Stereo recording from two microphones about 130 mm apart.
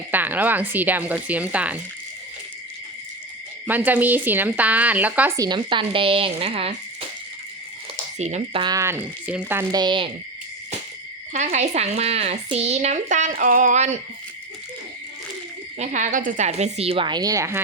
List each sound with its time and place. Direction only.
0.1 s speech: 15° right (ahead or behind)
3.7 s speech: 15° right (ahead or behind)
5.4 s speech: 35° right (ahead or behind)
8.2 s speech: 60° right (ahead or behind)
8.7 s speech: 20° right (ahead or behind)
9.7 s speech: 35° right (ahead or behind)
11.4 s speech: 60° right (ahead or behind)
15.8 s speech: 70° right (ahead or behind); by 17.6 s 25° right (ahead or behind)